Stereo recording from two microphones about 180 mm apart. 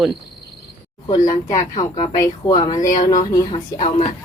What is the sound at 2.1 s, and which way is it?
A woman's voice, 20° left (ahead or behind).